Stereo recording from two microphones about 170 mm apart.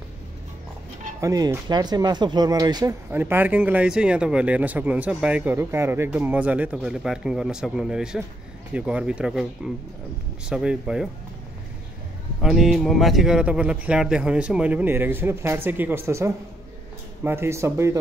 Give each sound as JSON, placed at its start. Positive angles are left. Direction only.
{"t": 1.2, "sound": "speech", "side_deg": -20}
{"t": 10.5, "sound": "speech", "side_deg": -5}
{"t": 12.4, "sound": "speech", "side_deg": 0}